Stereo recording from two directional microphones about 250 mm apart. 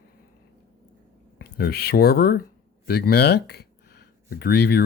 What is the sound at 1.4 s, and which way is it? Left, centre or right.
Speech, left.